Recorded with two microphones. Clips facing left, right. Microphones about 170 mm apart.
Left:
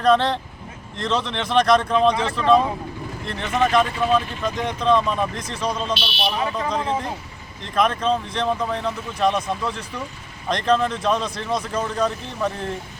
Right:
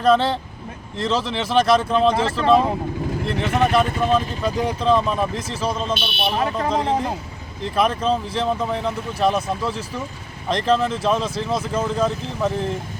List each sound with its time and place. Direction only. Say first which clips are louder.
0.0 s speech: right 1 dB; 5° right (ahead or behind)
2.1 s speech: right 3 dB; 30° right (ahead or behind)
3.2 s speech: right 1 dB; 5° right (ahead or behind)
3.8 s speech: right 1 dB; 45° right (ahead or behind)
4.6 s speech: even; 5° right (ahead or behind)
5.9 s speech: right 1 dB; 50° right (ahead or behind)
6.7 s speech: right 3 dB; 35° right (ahead or behind)
7.8 s speech: even; 5° right (ahead or behind)